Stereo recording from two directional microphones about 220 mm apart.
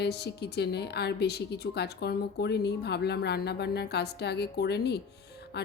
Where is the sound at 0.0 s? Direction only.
50° left (ahead or behind).